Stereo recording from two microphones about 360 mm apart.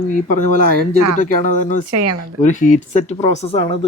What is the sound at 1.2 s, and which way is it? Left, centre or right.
Speech, left.